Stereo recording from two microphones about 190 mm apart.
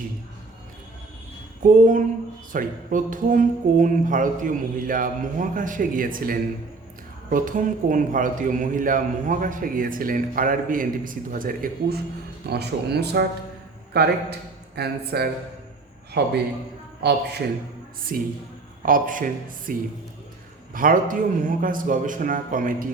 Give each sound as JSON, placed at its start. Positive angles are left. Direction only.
{"t": 1.6, "sound": "a man's voice", "side_deg": -45}
{"t": 12.5, "sound": "a man's voice", "side_deg": -60}
{"t": 20.7, "sound": "a man's voice", "side_deg": -45}